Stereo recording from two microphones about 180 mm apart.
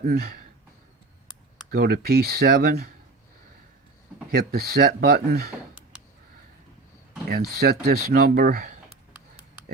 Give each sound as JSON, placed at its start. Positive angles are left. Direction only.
{"t": 0.0, "sound": "speech", "side_deg": -60}
{"t": 1.7, "sound": "speech", "side_deg": -55}
{"t": 4.3, "sound": "speech", "side_deg": -55}
{"t": 7.3, "sound": "speech", "side_deg": -60}